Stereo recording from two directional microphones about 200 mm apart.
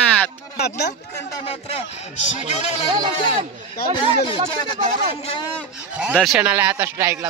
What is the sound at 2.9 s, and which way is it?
Speech, 20° right (ahead or behind).